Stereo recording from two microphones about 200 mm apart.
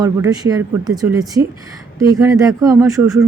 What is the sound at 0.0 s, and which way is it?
Speech, 20° right (ahead or behind).